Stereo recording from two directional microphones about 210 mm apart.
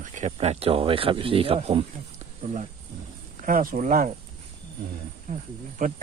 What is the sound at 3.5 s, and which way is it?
Speech, 40° right (ahead or behind).